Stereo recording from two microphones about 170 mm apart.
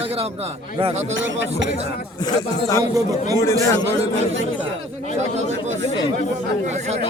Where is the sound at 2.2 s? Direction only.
20° left (ahead or behind).